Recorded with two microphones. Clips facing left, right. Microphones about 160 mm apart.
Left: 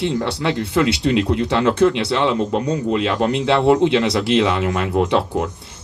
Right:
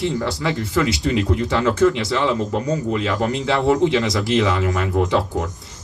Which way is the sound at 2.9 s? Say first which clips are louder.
Left 3 dB; 65° left (ahead or behind).